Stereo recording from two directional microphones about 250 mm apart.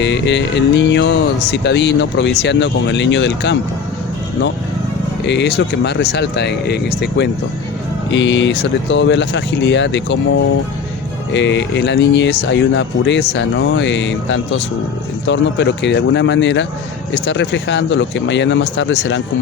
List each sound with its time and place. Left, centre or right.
0.0 s speech: left
5.2 s speech: left
8.1 s speech: left
11.3 s speech: left